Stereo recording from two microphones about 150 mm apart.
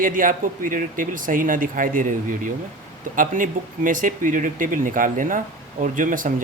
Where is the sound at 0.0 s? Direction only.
65° right (ahead or behind).